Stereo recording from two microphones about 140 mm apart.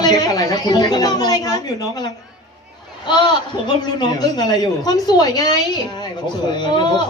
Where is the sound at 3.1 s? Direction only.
30° left (ahead or behind).